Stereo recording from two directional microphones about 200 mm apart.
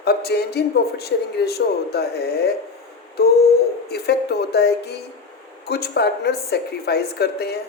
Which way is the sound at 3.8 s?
55° left (ahead or behind).